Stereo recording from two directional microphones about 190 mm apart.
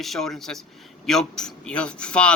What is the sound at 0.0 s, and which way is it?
Speech, centre (ahead or behind).